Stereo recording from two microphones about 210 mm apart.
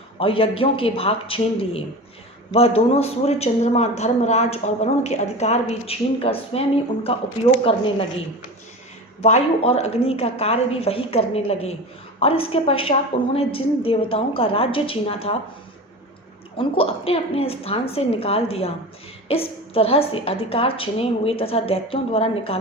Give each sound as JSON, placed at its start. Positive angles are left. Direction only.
{"t": 0.2, "sound": "speech", "side_deg": 25}
{"t": 9.2, "sound": "speech", "side_deg": 30}
{"t": 16.6, "sound": "speech", "side_deg": 25}